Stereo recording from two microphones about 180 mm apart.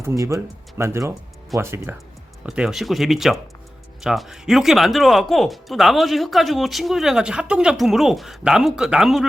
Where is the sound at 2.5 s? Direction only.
5° right (ahead or behind).